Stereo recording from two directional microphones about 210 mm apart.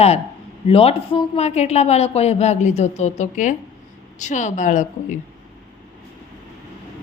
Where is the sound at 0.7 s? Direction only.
25° left (ahead or behind).